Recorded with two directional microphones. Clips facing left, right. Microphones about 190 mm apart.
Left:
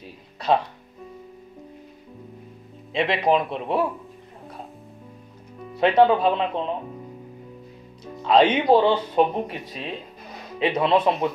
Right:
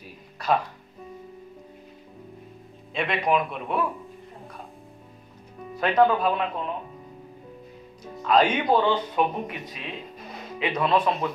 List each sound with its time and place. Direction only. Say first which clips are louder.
2.9 s speech: left 4 dB; 30° left (ahead or behind)
5.8 s speech: left 3 dB; 25° left (ahead or behind)
8.2 s speech: left 3 dB; 25° left (ahead or behind)